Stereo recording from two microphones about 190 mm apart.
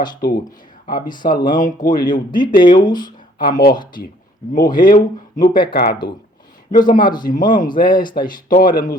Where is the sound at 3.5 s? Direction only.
50° left (ahead or behind).